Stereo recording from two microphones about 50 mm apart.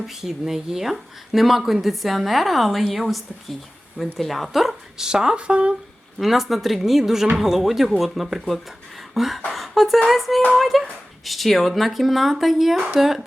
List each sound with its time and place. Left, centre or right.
0.0 s speech: centre
5.0 s speech: centre
6.1 s speech: centre
9.5 s a sound: centre
10.1 s speech: centre